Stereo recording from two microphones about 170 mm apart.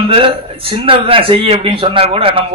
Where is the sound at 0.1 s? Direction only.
35° right (ahead or behind).